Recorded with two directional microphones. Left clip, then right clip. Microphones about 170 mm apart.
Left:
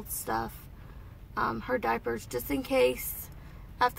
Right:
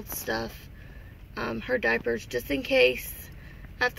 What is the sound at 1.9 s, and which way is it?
Speech, 25° left (ahead or behind).